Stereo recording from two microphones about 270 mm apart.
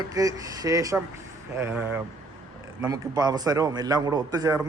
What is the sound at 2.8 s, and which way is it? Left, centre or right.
Speech, centre.